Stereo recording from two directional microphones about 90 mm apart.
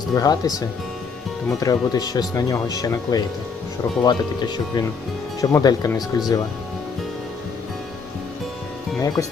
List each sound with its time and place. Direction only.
0.1 s speech: 45° left (ahead or behind)
5.4 s speech: 40° left (ahead or behind)
9.0 s speech: 40° left (ahead or behind)